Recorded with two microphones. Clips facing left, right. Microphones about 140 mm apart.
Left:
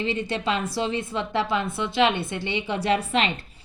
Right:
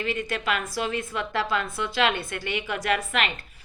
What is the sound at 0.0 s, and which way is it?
A woman's voice, 25° left (ahead or behind).